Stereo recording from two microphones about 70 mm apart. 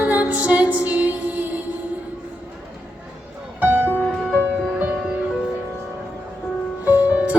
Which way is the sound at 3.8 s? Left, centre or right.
Left.